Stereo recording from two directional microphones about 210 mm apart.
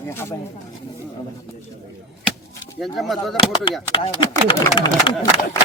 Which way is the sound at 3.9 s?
25° left (ahead or behind).